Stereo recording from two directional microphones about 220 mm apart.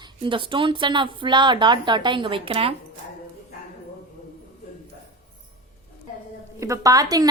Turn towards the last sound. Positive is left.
turn(degrees=-15)  # may be behind; listen again after turning